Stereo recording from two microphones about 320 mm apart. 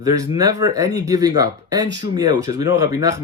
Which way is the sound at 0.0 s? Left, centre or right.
Centre.